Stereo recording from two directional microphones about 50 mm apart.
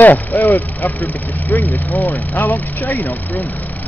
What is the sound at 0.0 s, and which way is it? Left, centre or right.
Speech, left.